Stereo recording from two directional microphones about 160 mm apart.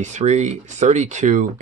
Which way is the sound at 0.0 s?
45° right (ahead or behind).